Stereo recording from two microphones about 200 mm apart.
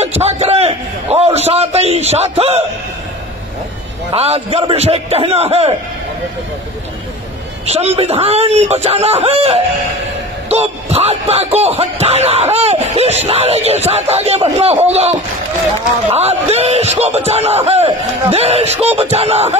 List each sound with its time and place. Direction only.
0.2 s a sound: 30° right (ahead or behind)
1.1 s a man's voice: 30° right (ahead or behind)
4.1 s speech: 30° right (ahead or behind)
7.6 s speech: 30° right (ahead or behind)